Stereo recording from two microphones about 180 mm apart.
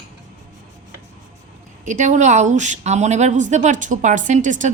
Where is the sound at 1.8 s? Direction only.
45° right (ahead or behind).